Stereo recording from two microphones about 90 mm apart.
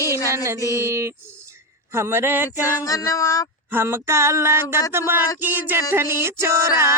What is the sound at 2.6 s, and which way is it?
Female singing, 35° left (ahead or behind).